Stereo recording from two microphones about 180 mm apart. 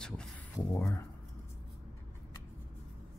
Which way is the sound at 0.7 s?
15° left (ahead or behind).